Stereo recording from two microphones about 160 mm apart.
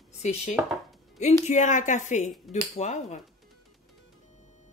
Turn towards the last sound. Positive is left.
turn(degrees=45)  # may be behind; listen again after turning